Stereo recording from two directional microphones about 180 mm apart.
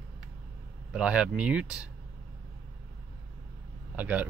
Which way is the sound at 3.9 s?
10° right (ahead or behind).